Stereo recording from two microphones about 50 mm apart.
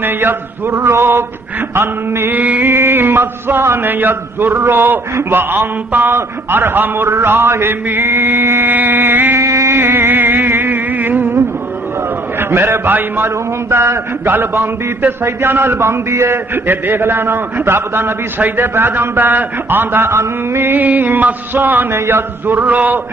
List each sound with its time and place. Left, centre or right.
0.0 s speech: right
2.3 s mantra: right
2.7 s speech: right
8.7 s a sound: right
9.4 s a sound: right
9.8 s insect: right
12.4 s speech: right
13.7 s a sound: right
14.2 s a man's voice: right
16.8 s speech: right
20.0 s mantra: right
21.9 s mantra: right